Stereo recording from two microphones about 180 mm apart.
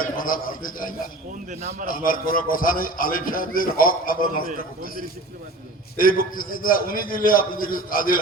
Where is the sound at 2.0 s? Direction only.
50° left (ahead or behind).